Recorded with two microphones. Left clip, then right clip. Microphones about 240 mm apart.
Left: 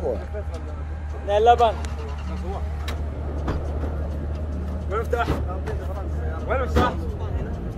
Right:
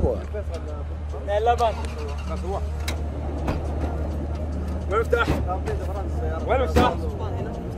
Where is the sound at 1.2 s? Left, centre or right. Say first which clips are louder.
Left 4 dB; left.